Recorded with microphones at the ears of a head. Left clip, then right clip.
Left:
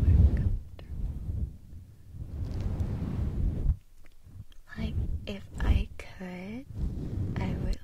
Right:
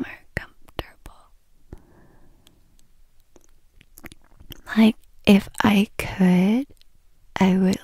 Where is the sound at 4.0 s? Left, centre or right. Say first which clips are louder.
Right 15 dB; right.